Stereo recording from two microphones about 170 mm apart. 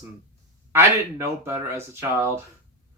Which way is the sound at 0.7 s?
15° right (ahead or behind).